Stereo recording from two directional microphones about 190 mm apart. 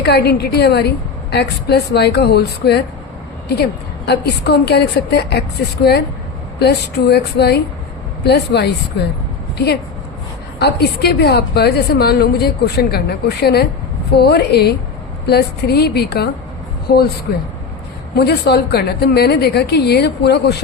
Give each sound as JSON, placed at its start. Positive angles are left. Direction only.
{"t": 0.0, "sound": "a woman's voice", "side_deg": 60}
{"t": 10.6, "sound": "a woman's voice", "side_deg": 60}
{"t": 18.1, "sound": "a woman's voice", "side_deg": 60}